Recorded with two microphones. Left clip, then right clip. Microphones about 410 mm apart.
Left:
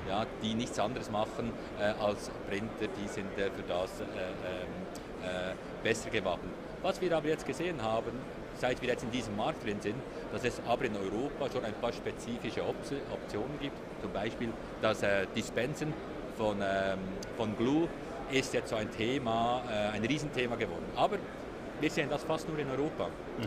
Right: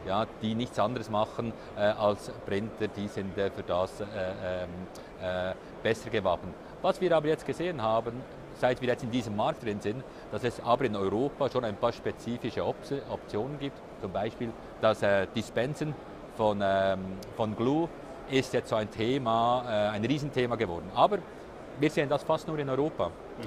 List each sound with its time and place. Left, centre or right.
0.1 s speech: right
21.8 s speech: right